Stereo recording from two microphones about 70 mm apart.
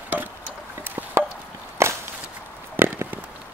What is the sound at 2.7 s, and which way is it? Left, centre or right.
Chop, right.